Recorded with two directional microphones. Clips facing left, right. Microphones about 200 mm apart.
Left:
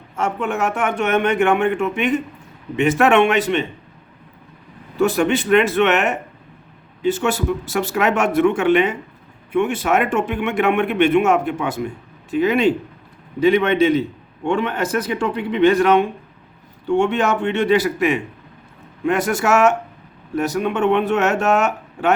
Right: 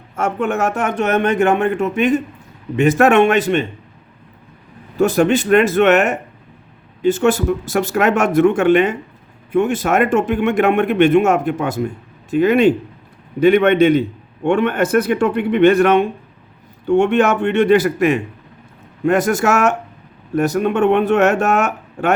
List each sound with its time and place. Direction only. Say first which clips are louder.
0.2 s speech: right 3 dB; 50° right (ahead or behind)
4.9 s speech: right 3 dB; 45° right (ahead or behind)